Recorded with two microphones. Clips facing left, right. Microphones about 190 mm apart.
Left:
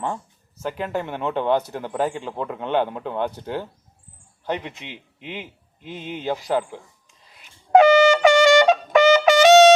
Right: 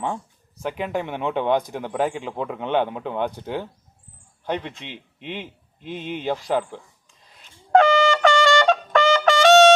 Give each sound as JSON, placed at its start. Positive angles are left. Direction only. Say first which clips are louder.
{"t": 0.5, "sound": "a man's voice", "louder": "even", "side_deg": -15}
{"t": 1.2, "sound": "a man's voice", "louder": "even", "side_deg": 0}
{"t": 1.5, "sound": "a man's voice", "louder": "even", "side_deg": -10}
{"t": 4.4, "sound": "a man's voice", "louder": "even", "side_deg": 10}
{"t": 7.4, "sound": "trumpet", "louder": "left 3 dB", "side_deg": 15}